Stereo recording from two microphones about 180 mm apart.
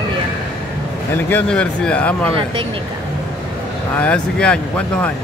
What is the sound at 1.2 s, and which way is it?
Speech, 10° left (ahead or behind).